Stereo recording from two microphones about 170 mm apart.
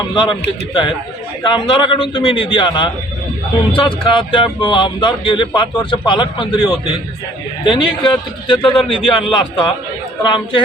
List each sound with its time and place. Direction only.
0.1 s speech: 25° left (ahead or behind)